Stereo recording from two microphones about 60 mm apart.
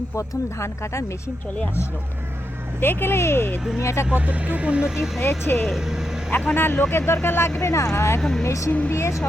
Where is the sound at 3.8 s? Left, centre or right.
Left.